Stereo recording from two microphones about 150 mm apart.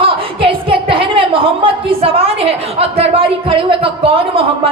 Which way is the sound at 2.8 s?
40° right (ahead or behind).